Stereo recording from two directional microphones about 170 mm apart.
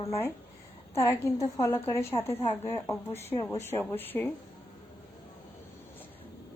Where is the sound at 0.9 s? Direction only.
15° left (ahead or behind).